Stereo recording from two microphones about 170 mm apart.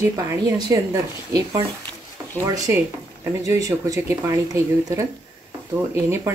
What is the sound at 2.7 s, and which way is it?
A woman's voice, 15° right (ahead or behind).